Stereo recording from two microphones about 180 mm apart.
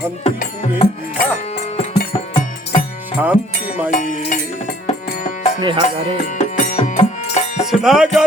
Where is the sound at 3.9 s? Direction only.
45° left (ahead or behind).